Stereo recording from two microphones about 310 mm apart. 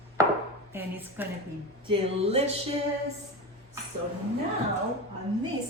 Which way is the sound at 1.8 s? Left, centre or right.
Centre.